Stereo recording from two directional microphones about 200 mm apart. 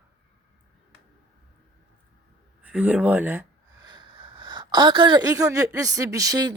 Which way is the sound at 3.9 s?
25° right (ahead or behind).